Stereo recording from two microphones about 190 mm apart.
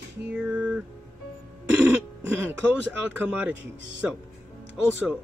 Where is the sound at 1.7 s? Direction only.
5° right (ahead or behind).